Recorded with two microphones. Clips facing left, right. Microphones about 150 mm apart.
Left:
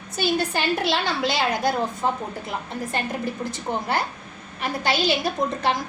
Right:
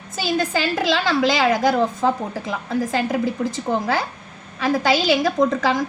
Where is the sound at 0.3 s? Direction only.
90° right.